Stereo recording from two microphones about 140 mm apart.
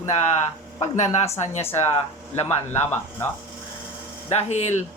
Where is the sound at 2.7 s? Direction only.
15° left (ahead or behind).